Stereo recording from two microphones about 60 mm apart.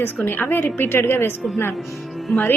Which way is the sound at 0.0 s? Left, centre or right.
Left.